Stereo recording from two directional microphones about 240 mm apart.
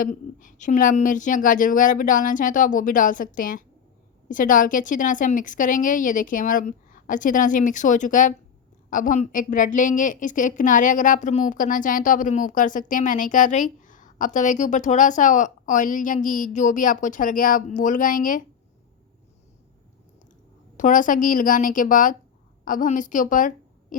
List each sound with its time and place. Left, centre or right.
0.0 s a woman's voice: left
20.7 s a woman's voice: left